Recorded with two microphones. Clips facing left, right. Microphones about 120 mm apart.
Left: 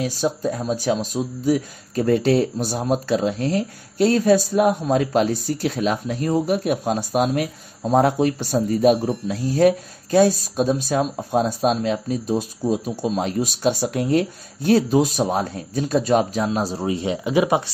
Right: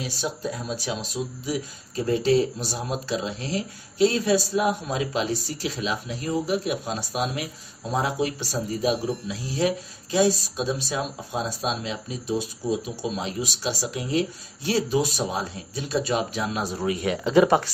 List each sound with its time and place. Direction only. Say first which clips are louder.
0.0 s speech: left 7 dB; 45° left (ahead or behind); by 17.6 s 15° left (ahead or behind)